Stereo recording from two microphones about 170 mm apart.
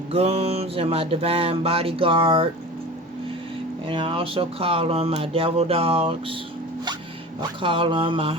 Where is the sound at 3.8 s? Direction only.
30° right (ahead or behind).